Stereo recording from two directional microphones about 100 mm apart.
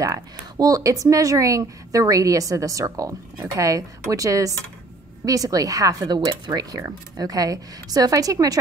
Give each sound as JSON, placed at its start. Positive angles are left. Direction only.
{"t": 0.0, "sound": "speech", "side_deg": -35}